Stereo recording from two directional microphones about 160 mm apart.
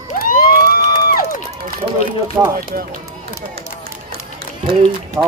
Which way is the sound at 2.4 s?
20° right (ahead or behind).